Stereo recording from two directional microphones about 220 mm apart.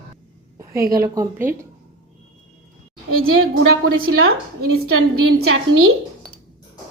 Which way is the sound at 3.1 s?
70° right (ahead or behind).